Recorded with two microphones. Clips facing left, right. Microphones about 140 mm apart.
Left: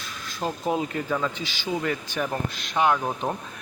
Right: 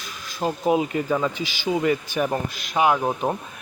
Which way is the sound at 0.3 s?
10° right (ahead or behind).